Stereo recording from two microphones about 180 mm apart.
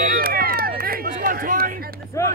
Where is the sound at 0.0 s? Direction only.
55° right (ahead or behind).